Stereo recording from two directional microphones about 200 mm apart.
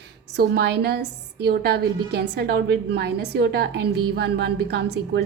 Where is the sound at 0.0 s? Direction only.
55° right (ahead or behind).